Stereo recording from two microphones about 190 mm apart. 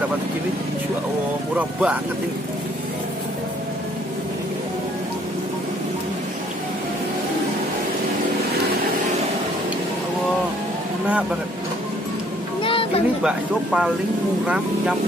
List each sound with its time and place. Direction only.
1.6 s speech: 5° right (ahead or behind)
12.6 s music: 30° left (ahead or behind)
13.2 s speech: 5° right (ahead or behind)